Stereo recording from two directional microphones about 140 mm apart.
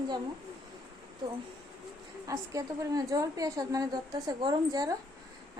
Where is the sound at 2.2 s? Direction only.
25° right (ahead or behind).